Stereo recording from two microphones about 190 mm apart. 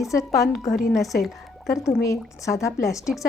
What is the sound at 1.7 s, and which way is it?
A woman's voice, 15° left (ahead or behind).